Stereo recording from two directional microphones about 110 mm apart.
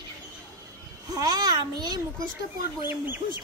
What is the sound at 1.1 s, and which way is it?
Speech, 35° right (ahead or behind).